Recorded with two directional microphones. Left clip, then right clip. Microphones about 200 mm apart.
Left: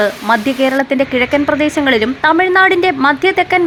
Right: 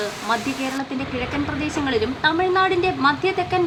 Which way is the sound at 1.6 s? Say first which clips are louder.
Left 10 dB; 35° left (ahead or behind).